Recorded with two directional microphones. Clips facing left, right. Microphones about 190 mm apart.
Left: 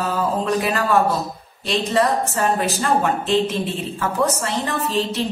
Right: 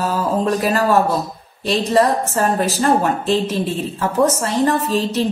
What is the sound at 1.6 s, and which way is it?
A woman's voice, 40° right (ahead or behind).